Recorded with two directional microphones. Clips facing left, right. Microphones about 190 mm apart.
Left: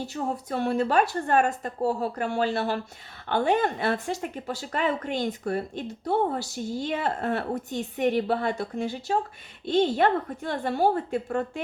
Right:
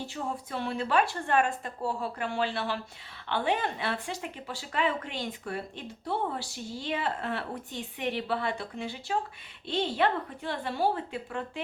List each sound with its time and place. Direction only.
0.0 s speech: 40° left (ahead or behind)